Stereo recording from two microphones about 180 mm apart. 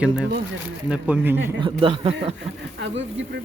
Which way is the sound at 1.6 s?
30° right (ahead or behind).